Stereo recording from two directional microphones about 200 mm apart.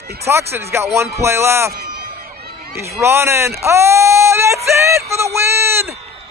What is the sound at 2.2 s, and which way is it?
Run, 50° right (ahead or behind).